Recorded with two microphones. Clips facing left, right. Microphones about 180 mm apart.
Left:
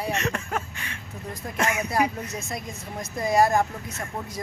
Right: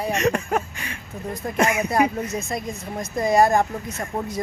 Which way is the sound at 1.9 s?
Centre (ahead or behind).